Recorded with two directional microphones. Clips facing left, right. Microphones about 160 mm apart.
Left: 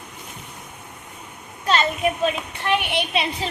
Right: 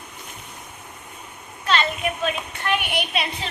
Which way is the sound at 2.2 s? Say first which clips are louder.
Left 3 dB; 25° left (ahead or behind).